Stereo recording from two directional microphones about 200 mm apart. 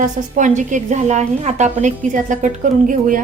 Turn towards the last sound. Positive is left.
turn(degrees=-40)  # may be behind; listen again after turning